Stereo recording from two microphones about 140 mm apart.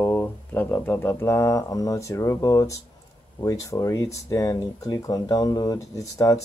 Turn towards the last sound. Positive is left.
turn(degrees=25)  # may be behind; listen again after turning